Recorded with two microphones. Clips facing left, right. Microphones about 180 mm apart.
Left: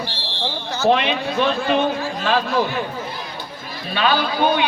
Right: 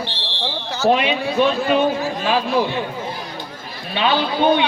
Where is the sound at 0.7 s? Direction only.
10° right (ahead or behind).